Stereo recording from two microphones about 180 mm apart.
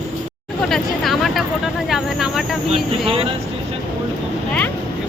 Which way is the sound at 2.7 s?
30° right (ahead or behind).